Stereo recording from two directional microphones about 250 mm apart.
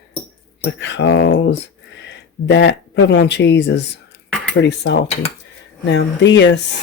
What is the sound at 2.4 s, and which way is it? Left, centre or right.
Speech, left.